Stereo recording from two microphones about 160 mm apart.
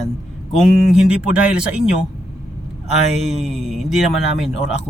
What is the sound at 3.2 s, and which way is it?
Speech, centre (ahead or behind).